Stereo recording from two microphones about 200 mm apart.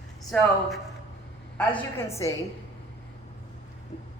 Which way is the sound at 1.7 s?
10° left (ahead or behind).